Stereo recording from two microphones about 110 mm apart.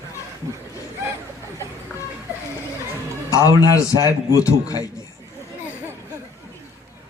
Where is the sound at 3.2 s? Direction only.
30° left (ahead or behind).